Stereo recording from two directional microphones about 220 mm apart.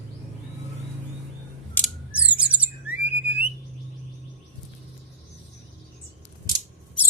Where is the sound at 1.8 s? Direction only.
10° left (ahead or behind).